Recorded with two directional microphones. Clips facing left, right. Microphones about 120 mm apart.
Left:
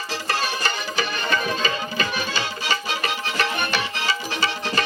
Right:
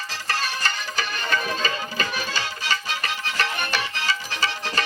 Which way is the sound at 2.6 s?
20° left (ahead or behind).